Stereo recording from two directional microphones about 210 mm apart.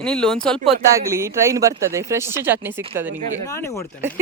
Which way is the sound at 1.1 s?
15° right (ahead or behind).